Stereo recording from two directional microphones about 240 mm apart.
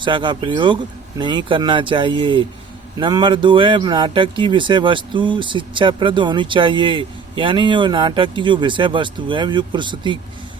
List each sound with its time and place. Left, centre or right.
0.0 s speech: centre